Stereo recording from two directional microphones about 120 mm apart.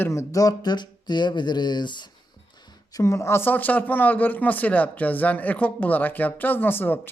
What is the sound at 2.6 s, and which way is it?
Speech, 30° left (ahead or behind).